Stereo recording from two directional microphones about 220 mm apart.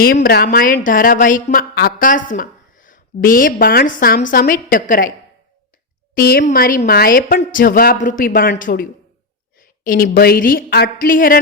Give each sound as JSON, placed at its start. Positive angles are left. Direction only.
{"t": 0.0, "sound": "a woman's voice", "side_deg": 45}
{"t": 6.1, "sound": "a woman's voice", "side_deg": 45}